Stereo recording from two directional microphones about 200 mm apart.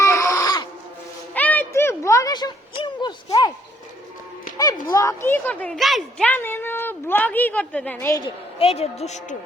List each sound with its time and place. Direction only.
0.0 s baby cry: 15° left (ahead or behind)
1.3 s a sound: 10° left (ahead or behind)
4.5 s speech: 15° left (ahead or behind)
8.5 s a woman's voice: 30° left (ahead or behind)